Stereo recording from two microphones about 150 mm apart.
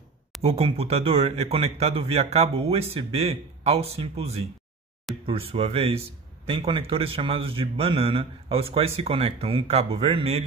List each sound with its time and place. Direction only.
0.4 s a man's voice: 40° right (ahead or behind)